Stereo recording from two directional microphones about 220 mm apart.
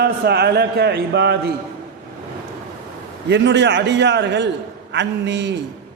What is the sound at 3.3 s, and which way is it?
A man's voice, 55° right (ahead or behind).